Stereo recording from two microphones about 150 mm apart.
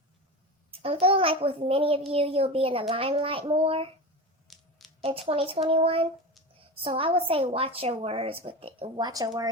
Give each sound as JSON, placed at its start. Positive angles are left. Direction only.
{"t": 0.7, "sound": "a woman's voice", "side_deg": -40}
{"t": 4.4, "sound": "a sound", "side_deg": 0}
{"t": 5.0, "sound": "a woman's voice", "side_deg": -40}